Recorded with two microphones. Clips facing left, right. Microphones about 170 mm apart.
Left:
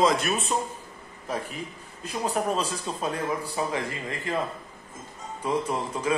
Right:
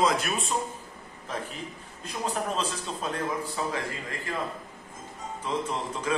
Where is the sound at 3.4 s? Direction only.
20° left (ahead or behind).